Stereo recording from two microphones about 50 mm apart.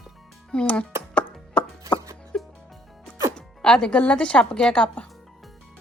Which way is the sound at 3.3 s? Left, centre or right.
Centre.